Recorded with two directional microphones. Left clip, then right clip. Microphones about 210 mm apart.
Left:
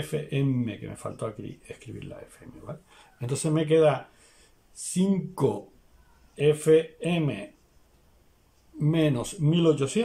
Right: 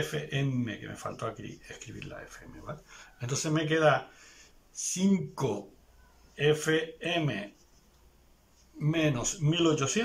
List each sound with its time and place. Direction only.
0.1 s speech: 20° left (ahead or behind)
8.7 s speech: 15° left (ahead or behind)